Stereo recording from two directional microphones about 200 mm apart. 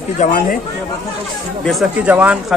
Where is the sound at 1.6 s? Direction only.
5° right (ahead or behind).